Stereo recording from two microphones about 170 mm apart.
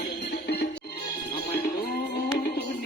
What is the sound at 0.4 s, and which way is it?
Music, 70° left (ahead or behind).